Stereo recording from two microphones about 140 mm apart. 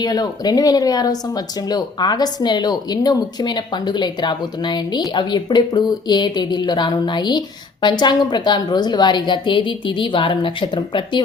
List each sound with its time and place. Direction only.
0.0 s speech: 30° left (ahead or behind)